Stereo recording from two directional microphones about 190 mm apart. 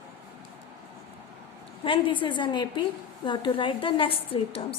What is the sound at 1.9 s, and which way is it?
A woman's voice, 25° left (ahead or behind).